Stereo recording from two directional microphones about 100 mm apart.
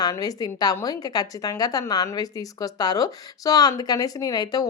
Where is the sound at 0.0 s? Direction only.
40° left (ahead or behind).